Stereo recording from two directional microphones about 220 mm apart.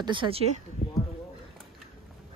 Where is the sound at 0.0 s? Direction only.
20° right (ahead or behind).